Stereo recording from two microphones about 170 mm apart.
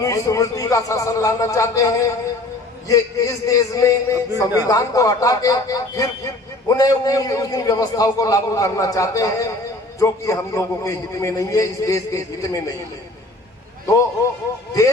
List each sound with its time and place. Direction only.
0.0 s a man's voice: 20° left (ahead or behind)